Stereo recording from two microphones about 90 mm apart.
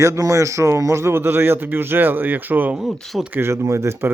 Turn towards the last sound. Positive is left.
turn(degrees=-30)  # may be behind; listen again after turning